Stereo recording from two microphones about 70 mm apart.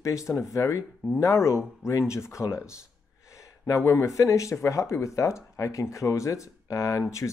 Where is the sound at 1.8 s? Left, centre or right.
Centre.